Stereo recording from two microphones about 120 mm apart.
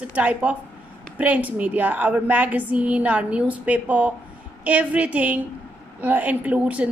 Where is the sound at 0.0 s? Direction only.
10° right (ahead or behind).